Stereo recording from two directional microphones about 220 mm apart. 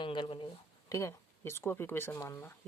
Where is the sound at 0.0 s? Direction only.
20° left (ahead or behind).